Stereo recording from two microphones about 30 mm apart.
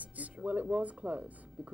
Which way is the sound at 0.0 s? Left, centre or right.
Right.